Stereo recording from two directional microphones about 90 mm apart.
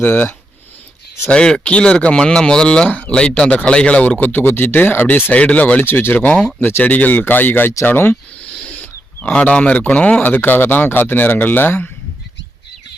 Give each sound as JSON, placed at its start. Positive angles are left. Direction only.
{"t": 0.0, "sound": "speech", "side_deg": 20}
{"t": 1.3, "sound": "speech", "side_deg": 10}